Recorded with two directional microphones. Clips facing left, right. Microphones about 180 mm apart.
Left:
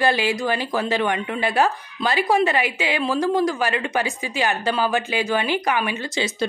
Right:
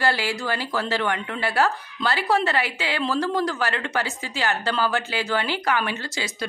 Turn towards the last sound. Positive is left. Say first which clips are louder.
# left 4 dB
turn(degrees=15)  # may be behind; listen again after turning